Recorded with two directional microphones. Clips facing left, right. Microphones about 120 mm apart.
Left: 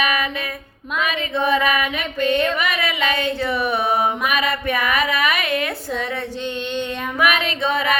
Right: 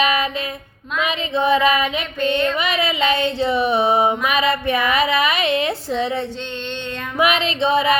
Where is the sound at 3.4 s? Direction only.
25° right (ahead or behind).